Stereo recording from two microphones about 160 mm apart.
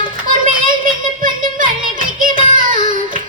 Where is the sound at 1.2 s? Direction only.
60° right (ahead or behind).